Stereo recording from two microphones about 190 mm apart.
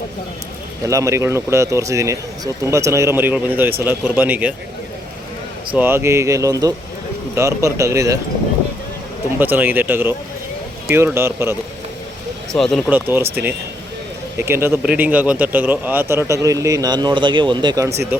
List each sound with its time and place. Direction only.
0.9 s a man's voice: 15° right (ahead or behind)
5.7 s a man's voice: 10° right (ahead or behind)
9.4 s a man's voice: 10° right (ahead or behind)
12.5 s speech: centre (ahead or behind)
12.9 s a man's voice: 10° right (ahead or behind)
14.3 s a man's voice: 10° right (ahead or behind)